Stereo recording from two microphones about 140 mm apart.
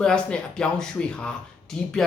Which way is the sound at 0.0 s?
5° left (ahead or behind).